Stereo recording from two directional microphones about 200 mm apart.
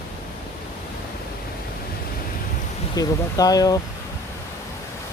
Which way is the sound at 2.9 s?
20° left (ahead or behind).